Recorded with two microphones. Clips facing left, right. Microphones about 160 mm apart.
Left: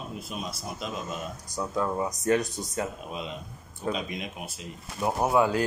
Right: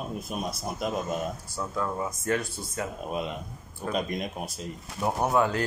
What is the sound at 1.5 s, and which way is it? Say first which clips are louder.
Speech: left 2 dB; 15° left (ahead or behind).